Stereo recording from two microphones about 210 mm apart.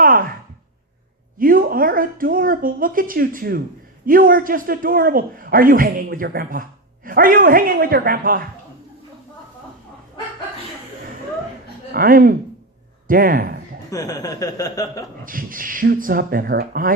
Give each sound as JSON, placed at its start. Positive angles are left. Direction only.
{"t": 0.0, "sound": "a sound", "side_deg": -40}
{"t": 1.4, "sound": "a man's voice", "side_deg": -40}
{"t": 11.9, "sound": "speech", "side_deg": -45}
{"t": 13.9, "sound": "speech", "side_deg": 15}
{"t": 15.2, "sound": "speech", "side_deg": -40}